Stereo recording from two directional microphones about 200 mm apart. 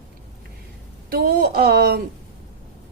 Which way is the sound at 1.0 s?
50° right (ahead or behind).